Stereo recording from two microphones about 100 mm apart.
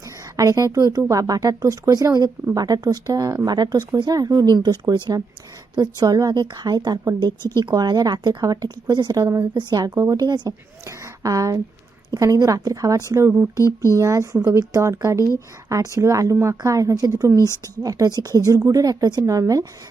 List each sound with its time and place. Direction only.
0.0 s a woman's voice: 35° right (ahead or behind)
7.3 s speech: 45° right (ahead or behind)
9.2 s speech: 25° right (ahead or behind)
9.6 s a woman's voice: 45° right (ahead or behind)
10.8 s a woman's voice: 35° right (ahead or behind)
13.6 s speech: 30° left (ahead or behind)
14.0 s speech: 30° right (ahead or behind)